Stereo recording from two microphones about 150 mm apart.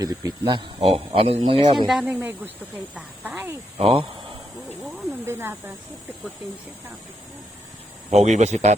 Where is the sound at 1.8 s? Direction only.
Centre (ahead or behind).